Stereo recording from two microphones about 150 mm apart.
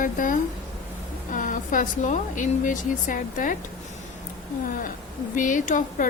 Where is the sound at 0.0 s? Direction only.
65° left (ahead or behind).